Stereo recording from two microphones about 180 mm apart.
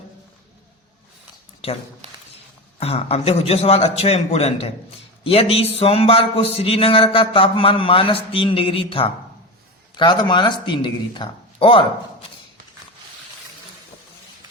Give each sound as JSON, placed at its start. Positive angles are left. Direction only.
{"t": 1.6, "sound": "speech", "side_deg": 35}
{"t": 2.8, "sound": "speech", "side_deg": 35}